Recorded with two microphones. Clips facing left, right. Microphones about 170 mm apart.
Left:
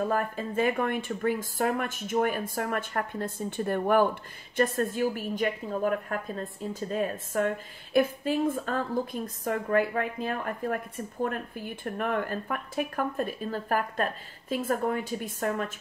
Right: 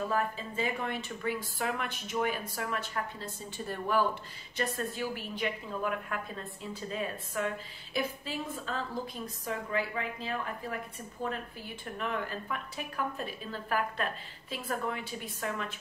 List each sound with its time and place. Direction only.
0.1 s speech: 50° left (ahead or behind)